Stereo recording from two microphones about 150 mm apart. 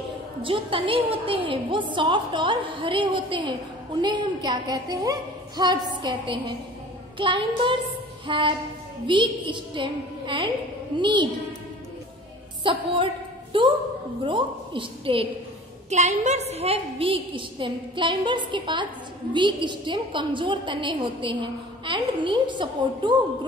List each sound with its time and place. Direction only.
0.4 s a woman's voice: 35° right (ahead or behind)
12.6 s a woman's voice: 35° right (ahead or behind)
15.9 s a woman's voice: 50° right (ahead or behind); by 23.1 s 30° right (ahead or behind)